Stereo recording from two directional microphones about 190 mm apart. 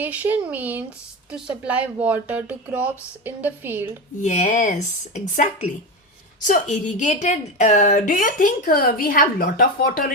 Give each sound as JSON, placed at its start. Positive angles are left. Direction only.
{"t": 0.0, "sound": "speech", "side_deg": -10}
{"t": 4.2, "sound": "a woman's voice", "side_deg": 40}